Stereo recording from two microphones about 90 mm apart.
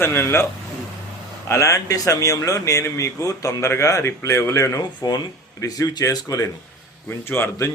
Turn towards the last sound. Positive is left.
turn(degrees=25)  # may be behind; listen again after turning